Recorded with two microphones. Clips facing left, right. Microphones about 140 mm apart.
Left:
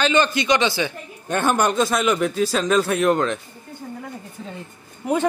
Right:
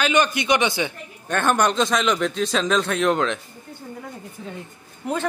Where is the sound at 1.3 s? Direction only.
10° left (ahead or behind).